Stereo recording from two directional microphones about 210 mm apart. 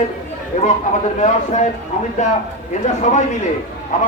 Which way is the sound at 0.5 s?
35° left (ahead or behind).